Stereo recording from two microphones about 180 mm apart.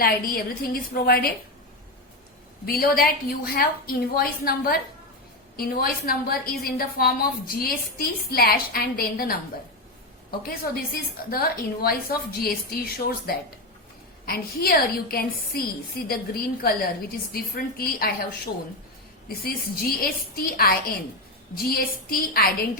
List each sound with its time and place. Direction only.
0.0 s a woman's voice: 55° left (ahead or behind)
2.6 s a woman's voice: 55° left (ahead or behind)
10.4 s a woman's voice: 55° left (ahead or behind)
19.3 s a woman's voice: 55° left (ahead or behind)